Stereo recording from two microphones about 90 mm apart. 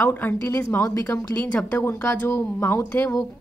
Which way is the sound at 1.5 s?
15° left (ahead or behind).